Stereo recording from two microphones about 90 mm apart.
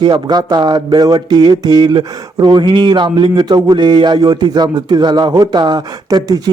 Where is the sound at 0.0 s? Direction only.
50° right (ahead or behind).